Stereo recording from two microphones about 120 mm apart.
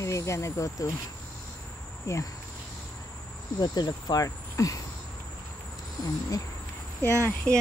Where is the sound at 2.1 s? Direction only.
25° left (ahead or behind).